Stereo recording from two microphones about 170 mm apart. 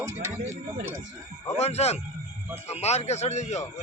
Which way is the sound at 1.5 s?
40° left (ahead or behind).